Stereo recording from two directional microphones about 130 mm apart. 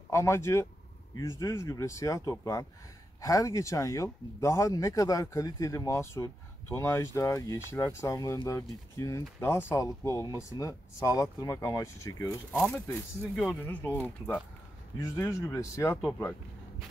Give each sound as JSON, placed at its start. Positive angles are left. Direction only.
{"t": 0.1, "sound": "speech", "side_deg": 20}